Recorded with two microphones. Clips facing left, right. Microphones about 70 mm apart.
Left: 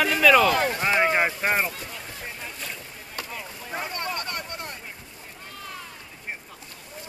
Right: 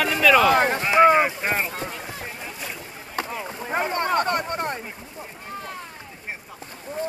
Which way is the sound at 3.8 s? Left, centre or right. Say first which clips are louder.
Right 11 dB; right.